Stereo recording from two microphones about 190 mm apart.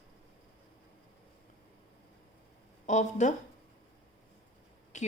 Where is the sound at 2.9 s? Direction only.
40° left (ahead or behind).